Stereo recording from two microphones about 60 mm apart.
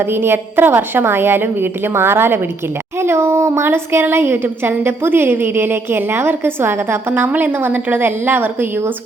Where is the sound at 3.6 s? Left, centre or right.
Right.